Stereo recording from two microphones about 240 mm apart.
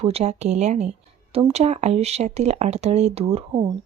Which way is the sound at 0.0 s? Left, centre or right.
Right.